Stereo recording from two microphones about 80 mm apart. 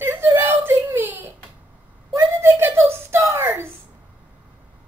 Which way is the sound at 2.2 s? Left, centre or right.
Right.